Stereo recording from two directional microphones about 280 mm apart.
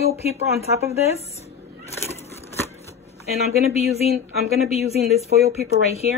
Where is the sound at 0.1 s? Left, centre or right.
Left.